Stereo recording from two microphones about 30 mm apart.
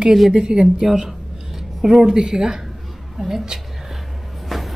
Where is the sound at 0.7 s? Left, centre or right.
Centre.